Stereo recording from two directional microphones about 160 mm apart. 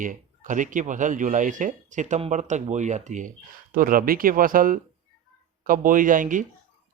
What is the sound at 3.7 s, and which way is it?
Speech, 60° right (ahead or behind).